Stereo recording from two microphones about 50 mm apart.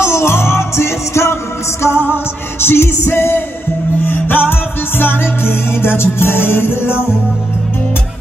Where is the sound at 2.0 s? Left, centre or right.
Left.